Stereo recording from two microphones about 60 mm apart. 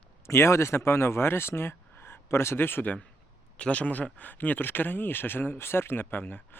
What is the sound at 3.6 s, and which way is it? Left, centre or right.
Speech, left.